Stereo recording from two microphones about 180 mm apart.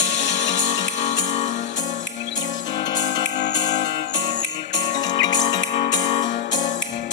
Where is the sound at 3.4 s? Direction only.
75° left (ahead or behind).